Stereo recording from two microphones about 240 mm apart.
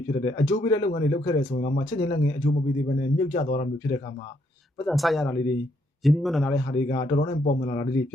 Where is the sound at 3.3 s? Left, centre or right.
Left.